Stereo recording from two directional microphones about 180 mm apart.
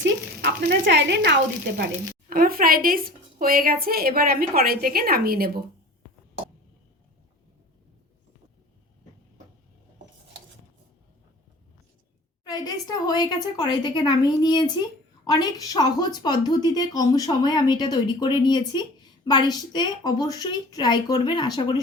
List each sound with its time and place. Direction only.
0.7 s speech: 80° right
2.3 s a woman's voice: 55° right (ahead or behind)
12.5 s a woman's voice: 20° left (ahead or behind)